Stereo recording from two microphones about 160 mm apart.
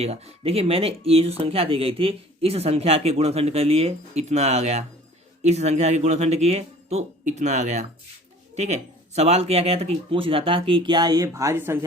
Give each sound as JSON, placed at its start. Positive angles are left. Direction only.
{"t": 0.0, "sound": "speech", "side_deg": -40}